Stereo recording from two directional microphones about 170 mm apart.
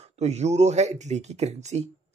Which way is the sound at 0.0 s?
40° right (ahead or behind).